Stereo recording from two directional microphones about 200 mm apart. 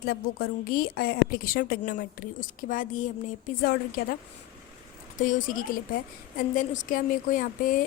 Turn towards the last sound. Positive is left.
turn(degrees=40)  # may be behind; listen again after turning